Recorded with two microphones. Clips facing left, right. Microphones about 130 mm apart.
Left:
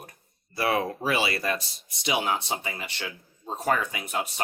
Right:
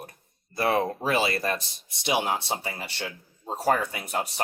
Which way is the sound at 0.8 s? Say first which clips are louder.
Right 2 dB; 45° right (ahead or behind).